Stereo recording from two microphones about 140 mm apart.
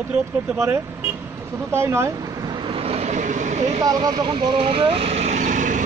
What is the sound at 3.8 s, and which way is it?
Speech, 30° right (ahead or behind).